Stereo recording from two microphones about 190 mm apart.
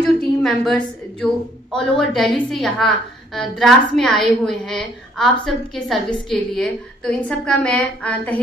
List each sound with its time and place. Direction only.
0.0 s a woman's voice: centre (ahead or behind)